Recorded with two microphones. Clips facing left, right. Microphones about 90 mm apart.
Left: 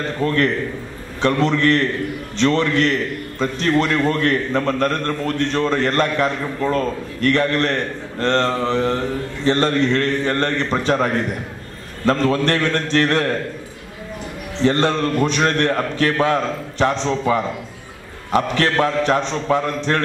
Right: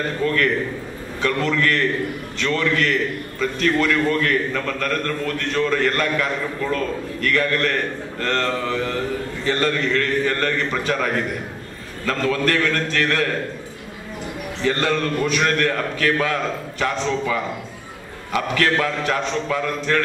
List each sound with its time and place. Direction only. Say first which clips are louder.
0.2 s a man's voice: left 2 dB; 30° left (ahead or behind)
12.1 s a man's voice: left 3 dB; 30° left (ahead or behind)
14.6 s a man's voice: left 4 dB; 35° left (ahead or behind)